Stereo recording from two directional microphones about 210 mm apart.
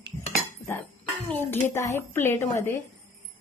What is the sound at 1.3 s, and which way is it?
A woman's voice, 10° left (ahead or behind).